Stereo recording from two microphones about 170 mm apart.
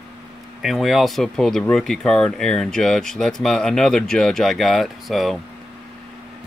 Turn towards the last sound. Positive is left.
turn(degrees=0)  # may be behind; listen again after turning